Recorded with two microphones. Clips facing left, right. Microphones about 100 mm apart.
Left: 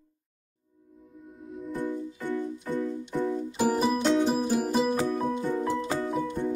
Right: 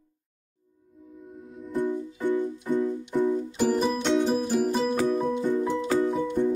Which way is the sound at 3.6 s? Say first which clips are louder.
Left 1 dB; 5° left (ahead or behind).